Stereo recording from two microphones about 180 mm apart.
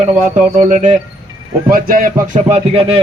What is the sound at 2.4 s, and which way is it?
Speech, 35° right (ahead or behind).